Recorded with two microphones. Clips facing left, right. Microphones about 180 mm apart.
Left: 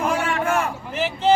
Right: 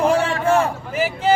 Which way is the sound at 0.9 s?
5° right (ahead or behind).